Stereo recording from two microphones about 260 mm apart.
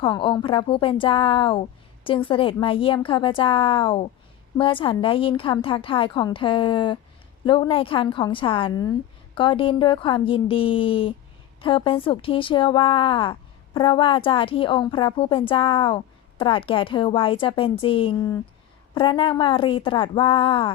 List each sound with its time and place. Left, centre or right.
0.0 s a woman's voice: centre